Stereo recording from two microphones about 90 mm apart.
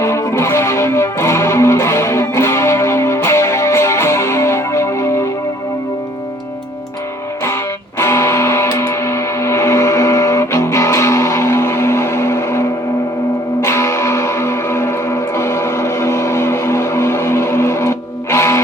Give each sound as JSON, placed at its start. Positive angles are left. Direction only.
{"t": 0.0, "sound": "music", "side_deg": 30}
{"t": 7.9, "sound": "music", "side_deg": 30}